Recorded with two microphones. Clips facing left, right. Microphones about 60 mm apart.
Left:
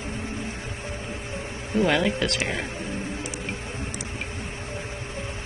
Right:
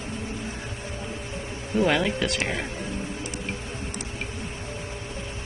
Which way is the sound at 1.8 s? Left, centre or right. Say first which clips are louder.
Left 1 dB; centre.